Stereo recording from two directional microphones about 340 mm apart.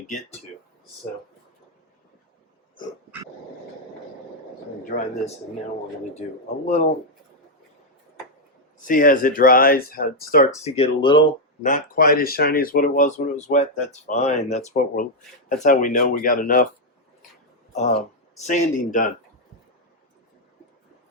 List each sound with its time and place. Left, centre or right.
4.9 s speech: left
8.9 s speech: left
17.7 s speech: left